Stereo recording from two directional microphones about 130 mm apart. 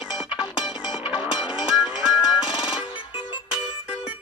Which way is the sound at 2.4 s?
35° left (ahead or behind).